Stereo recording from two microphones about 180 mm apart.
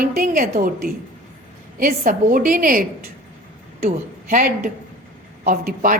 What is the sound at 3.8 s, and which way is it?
A woman's voice, 45° right (ahead or behind).